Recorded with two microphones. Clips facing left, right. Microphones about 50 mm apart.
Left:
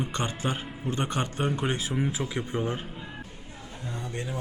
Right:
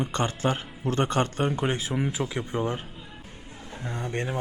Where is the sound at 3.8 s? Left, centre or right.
Right.